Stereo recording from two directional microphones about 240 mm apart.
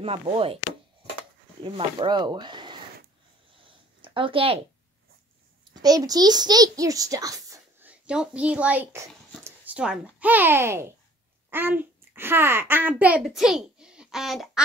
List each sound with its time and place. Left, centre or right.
0.0 s speech: right
1.6 s speech: centre
3.6 s a sound: right
5.8 s a child's voice: centre